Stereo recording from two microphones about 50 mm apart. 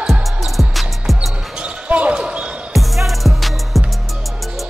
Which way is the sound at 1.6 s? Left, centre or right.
Right.